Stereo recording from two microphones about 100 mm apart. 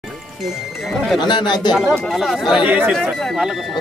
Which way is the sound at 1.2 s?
45° left (ahead or behind).